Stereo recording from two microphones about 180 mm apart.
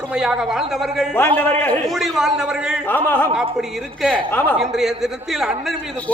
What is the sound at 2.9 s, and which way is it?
Speech, 10° left (ahead or behind).